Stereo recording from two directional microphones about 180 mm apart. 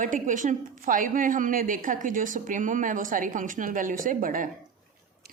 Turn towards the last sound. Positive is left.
turn(degrees=-50)  # may be behind; listen again after turning